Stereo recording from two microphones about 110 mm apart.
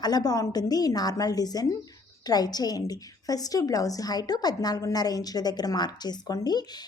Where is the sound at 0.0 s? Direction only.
35° left (ahead or behind).